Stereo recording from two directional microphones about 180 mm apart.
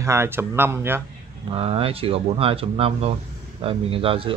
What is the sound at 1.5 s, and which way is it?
A man's voice, 35° right (ahead or behind).